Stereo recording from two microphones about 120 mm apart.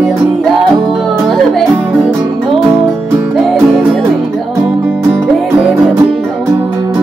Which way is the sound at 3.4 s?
Centre (ahead or behind).